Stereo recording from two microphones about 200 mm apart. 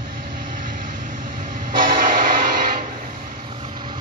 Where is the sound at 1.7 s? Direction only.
20° right (ahead or behind).